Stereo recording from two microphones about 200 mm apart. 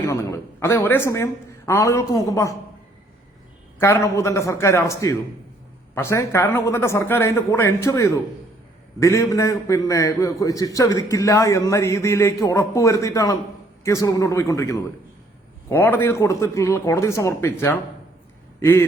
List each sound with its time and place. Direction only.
0.0 s a man's voice: 15° left (ahead or behind)
3.8 s a man's voice: 15° left (ahead or behind)